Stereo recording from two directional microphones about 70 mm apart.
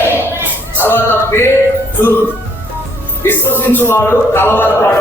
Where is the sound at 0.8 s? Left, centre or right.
Left.